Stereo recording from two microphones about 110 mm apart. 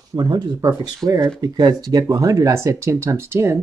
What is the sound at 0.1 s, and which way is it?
Speech, 35° right (ahead or behind).